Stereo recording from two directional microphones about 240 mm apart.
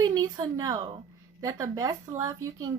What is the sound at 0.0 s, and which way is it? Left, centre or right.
A woman's voice, centre.